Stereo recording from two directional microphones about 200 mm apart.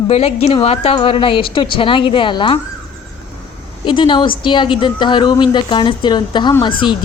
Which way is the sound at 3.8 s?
25° left (ahead or behind).